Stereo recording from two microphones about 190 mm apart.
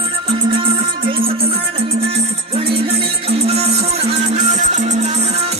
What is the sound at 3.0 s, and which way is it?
Music, 30° right (ahead or behind).